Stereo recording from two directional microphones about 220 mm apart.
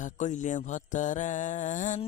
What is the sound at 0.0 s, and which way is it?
Mantra, 35° left (ahead or behind).